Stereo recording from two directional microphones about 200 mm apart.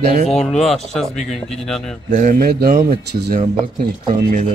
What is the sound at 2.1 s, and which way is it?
Speech, 40° right (ahead or behind).